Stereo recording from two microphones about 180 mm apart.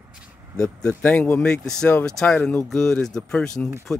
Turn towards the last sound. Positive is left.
turn(degrees=5)  # may be behind; listen again after turning